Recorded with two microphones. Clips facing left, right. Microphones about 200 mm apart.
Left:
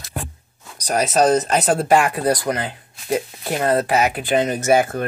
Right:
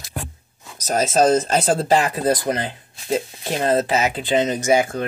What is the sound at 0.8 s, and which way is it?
Speech, 25° right (ahead or behind).